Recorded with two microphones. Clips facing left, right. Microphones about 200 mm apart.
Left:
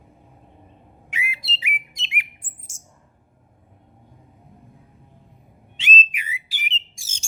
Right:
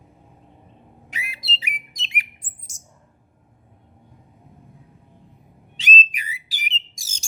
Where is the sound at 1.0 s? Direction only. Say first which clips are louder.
Left 3 dB; 35° right (ahead or behind).